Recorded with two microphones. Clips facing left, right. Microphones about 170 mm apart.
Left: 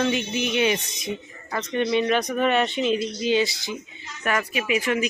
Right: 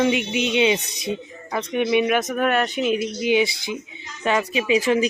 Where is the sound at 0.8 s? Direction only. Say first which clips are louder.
Right 4 dB; 70° right (ahead or behind).